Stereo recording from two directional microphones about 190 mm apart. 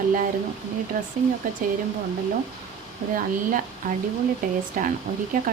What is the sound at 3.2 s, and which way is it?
Speech, 45° right (ahead or behind).